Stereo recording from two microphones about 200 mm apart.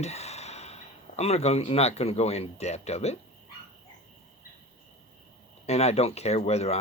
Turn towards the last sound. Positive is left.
turn(degrees=30)  # may be behind; listen again after turning